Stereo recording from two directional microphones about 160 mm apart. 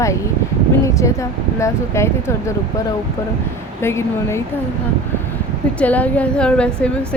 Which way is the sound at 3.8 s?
15° left (ahead or behind).